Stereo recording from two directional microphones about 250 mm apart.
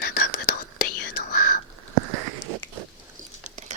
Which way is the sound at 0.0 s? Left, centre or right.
Left.